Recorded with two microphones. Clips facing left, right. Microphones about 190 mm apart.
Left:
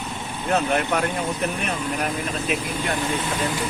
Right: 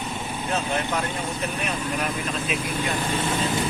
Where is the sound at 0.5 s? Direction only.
55° left (ahead or behind).